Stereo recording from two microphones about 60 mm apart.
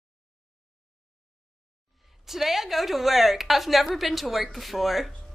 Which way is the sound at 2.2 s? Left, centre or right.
Centre.